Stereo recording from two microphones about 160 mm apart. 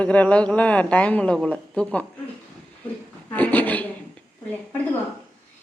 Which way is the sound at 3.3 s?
10° left (ahead or behind).